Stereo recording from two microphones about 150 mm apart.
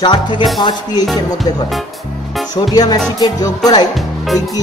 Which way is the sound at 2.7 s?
25° left (ahead or behind).